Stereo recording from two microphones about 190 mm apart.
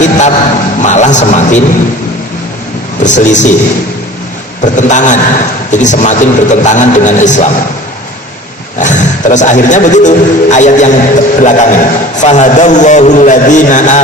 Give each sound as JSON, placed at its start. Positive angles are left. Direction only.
{"t": 0.0, "sound": "a sound", "side_deg": 40}
{"t": 0.8, "sound": "a man's voice", "side_deg": 40}
{"t": 3.0, "sound": "a man's voice", "side_deg": 40}
{"t": 4.6, "sound": "a man's voice", "side_deg": 40}
{"t": 8.8, "sound": "a man's voice", "side_deg": 40}